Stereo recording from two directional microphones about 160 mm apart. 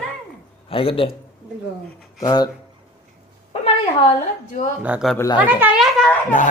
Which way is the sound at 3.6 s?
45° left (ahead or behind).